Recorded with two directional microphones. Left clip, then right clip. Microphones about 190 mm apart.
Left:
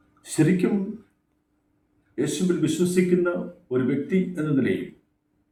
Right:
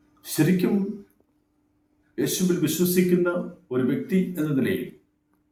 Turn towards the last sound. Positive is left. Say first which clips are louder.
# left 1 dB
turn(degrees=0)  # may be behind; listen again after turning